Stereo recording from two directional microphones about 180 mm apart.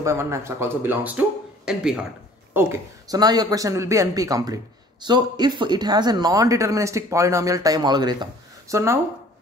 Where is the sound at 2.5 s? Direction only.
15° right (ahead or behind).